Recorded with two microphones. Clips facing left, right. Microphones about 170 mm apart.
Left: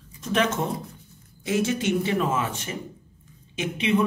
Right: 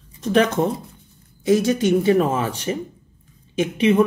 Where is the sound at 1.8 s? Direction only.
40° right (ahead or behind).